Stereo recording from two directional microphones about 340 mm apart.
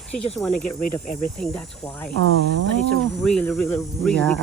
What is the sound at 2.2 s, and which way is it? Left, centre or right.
Speech, right.